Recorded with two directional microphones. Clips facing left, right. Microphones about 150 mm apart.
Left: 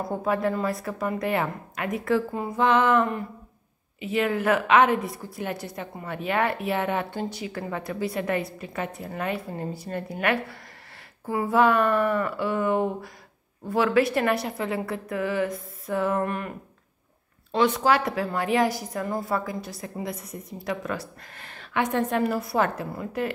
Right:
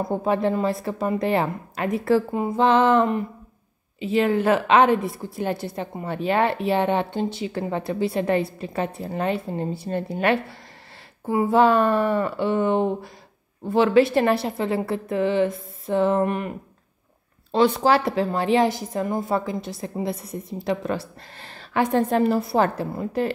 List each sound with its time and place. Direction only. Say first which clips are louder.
0.0 s a woman's voice: right 3 dB; 25° right (ahead or behind)
17.5 s a woman's voice: right 3 dB; 30° right (ahead or behind)